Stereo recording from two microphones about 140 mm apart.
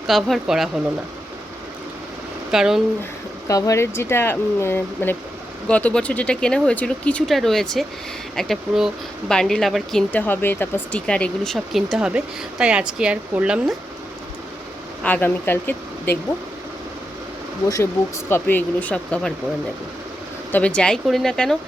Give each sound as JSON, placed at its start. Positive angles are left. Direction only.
{"t": 0.1, "sound": "speech", "side_deg": 0}
{"t": 2.5, "sound": "speech", "side_deg": -5}
{"t": 3.0, "sound": "speech", "side_deg": 20}
{"t": 10.1, "sound": "speech", "side_deg": 10}
{"t": 15.0, "sound": "speech", "side_deg": 15}
{"t": 18.3, "sound": "speech", "side_deg": 15}
{"t": 20.5, "sound": "speech", "side_deg": 10}